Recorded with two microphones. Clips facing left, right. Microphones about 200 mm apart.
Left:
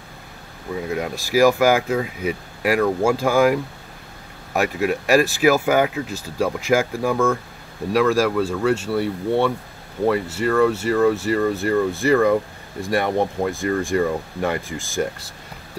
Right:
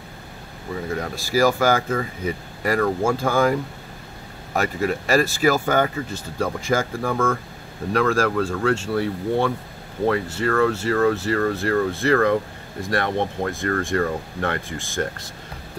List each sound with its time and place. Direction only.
0.8 s speech: 10° left (ahead or behind)
4.6 s speech: 10° left (ahead or behind)